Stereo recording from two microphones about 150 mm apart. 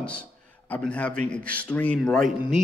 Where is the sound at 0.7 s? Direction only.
10° left (ahead or behind).